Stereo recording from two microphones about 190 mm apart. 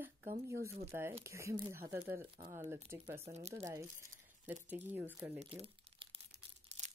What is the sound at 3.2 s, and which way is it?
Speech, 35° right (ahead or behind).